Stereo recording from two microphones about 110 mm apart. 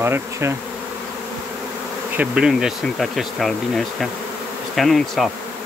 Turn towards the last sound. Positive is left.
turn(degrees=0)  # may be behind; listen again after turning